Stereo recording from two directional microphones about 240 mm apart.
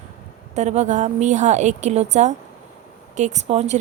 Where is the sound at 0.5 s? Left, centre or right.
Right.